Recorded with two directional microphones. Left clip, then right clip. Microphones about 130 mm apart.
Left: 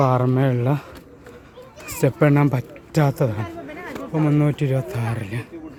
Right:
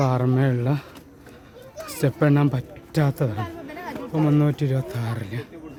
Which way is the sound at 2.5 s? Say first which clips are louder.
Left 4 dB; 20° left (ahead or behind).